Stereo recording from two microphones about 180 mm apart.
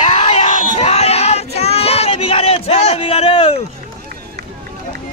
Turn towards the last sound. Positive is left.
turn(degrees=35)  # may be behind; listen again after turning